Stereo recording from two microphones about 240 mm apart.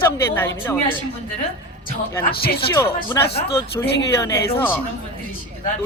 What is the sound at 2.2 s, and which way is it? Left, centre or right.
Speech, left.